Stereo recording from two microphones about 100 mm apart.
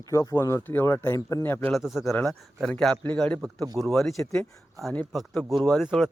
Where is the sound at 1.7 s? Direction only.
Centre (ahead or behind); by 3.3 s 15° left (ahead or behind).